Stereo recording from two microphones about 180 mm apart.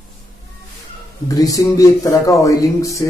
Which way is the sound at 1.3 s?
20° left (ahead or behind).